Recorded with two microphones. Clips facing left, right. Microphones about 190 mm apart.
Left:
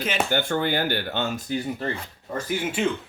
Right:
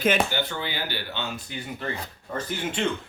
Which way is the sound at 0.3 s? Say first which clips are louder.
Left 6 dB; 50° left (ahead or behind).